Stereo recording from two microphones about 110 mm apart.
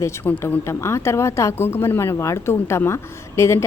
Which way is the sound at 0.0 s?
25° left (ahead or behind).